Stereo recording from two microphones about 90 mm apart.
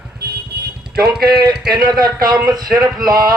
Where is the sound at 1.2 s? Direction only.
50° right (ahead or behind).